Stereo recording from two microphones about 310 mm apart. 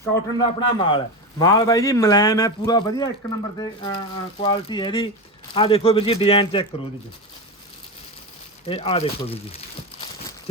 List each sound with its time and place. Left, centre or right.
0.0 s a man's voice: centre
8.6 s speech: centre